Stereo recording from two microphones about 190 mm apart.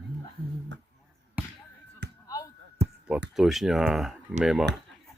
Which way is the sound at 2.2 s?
20° left (ahead or behind).